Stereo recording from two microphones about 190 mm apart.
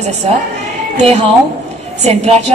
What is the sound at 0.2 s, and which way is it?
A man's voice, 35° right (ahead or behind).